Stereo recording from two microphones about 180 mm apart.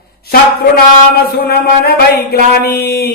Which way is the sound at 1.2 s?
60° left (ahead or behind).